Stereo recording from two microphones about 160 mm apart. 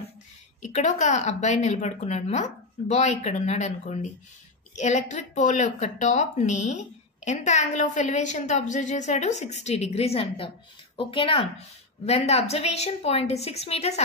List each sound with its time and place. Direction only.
0.6 s a woman's voice: 50° left (ahead or behind)